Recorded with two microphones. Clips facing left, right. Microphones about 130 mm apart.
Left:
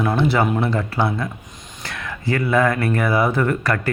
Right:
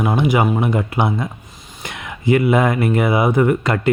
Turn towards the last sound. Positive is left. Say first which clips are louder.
# right 4 dB
turn(degrees=-20)  # may be behind; listen again after turning